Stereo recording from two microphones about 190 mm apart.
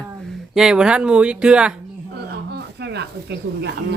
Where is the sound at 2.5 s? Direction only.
60° right (ahead or behind).